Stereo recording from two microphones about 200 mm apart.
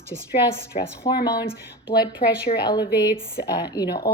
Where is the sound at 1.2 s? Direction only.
20° left (ahead or behind).